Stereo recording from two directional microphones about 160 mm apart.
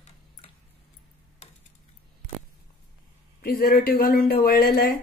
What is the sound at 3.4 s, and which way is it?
Speech, 60° left (ahead or behind).